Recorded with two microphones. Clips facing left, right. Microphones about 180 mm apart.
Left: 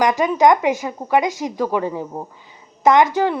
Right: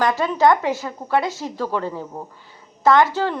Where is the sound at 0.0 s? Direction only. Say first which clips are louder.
Left 2 dB; 15° left (ahead or behind).